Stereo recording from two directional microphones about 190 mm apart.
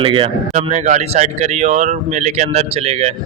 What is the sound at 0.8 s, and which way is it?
Speech, 40° right (ahead or behind).